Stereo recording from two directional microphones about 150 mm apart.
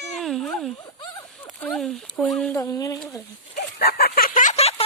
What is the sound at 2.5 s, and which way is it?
Speech, 25° left (ahead or behind).